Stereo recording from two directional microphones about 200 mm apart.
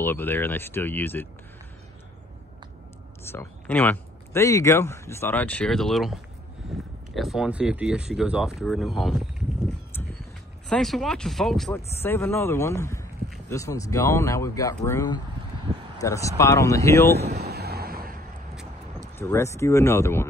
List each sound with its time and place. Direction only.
0.0 s speech: 10° left (ahead or behind)
3.3 s speech: 10° left (ahead or behind)
7.2 s speech: centre (ahead or behind)
10.7 s speech: centre (ahead or behind)
12.0 s speech: 10° left (ahead or behind)
17.2 s speech: 35° right (ahead or behind)
17.5 s a sound: 50° right (ahead or behind)
19.1 s speech: 15° left (ahead or behind)